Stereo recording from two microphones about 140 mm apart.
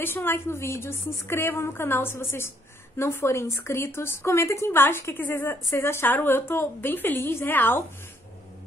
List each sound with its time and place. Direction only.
0.0 s a woman's voice: 15° left (ahead or behind)